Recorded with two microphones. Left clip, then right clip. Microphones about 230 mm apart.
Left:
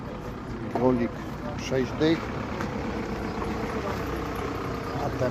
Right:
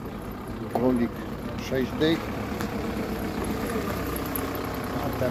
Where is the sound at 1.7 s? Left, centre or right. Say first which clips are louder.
Even; centre.